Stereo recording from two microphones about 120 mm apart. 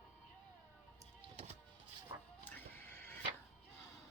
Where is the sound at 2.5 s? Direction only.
15° left (ahead or behind).